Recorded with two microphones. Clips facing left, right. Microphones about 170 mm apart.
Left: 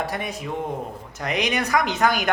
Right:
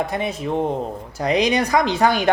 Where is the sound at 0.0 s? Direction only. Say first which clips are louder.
Right 5 dB; 20° right (ahead or behind).